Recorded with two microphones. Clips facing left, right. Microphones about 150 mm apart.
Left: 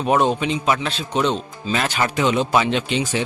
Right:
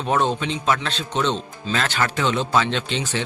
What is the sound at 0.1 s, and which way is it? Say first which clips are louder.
Speech: left 3 dB; 15° left (ahead or behind).